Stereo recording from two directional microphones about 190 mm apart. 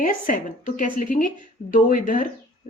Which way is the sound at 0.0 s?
45° left (ahead or behind).